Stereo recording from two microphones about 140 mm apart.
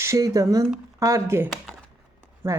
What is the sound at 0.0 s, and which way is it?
Speech, 20° right (ahead or behind).